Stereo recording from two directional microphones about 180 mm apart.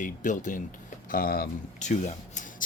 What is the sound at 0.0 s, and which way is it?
Speech, 45° left (ahead or behind).